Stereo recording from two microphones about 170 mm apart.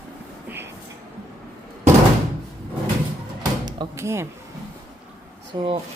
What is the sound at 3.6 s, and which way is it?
Speech, 20° right (ahead or behind).